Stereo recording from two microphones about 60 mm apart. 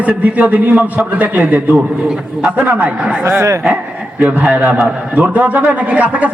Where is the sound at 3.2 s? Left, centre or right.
Right.